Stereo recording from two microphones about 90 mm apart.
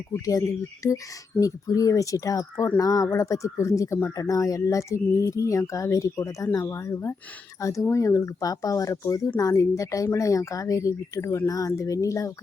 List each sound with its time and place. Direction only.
0.3 s speech: 35° left (ahead or behind)